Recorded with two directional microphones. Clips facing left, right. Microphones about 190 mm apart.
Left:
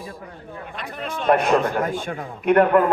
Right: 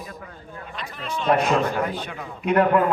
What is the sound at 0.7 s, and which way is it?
A man's voice, 55° left (ahead or behind).